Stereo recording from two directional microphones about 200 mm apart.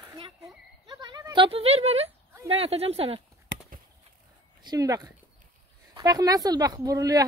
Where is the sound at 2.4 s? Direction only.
30° right (ahead or behind).